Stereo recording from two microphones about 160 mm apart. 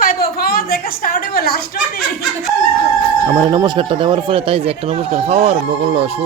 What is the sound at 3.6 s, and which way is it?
Speech, 30° right (ahead or behind).